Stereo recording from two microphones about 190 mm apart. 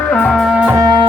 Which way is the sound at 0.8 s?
20° right (ahead or behind).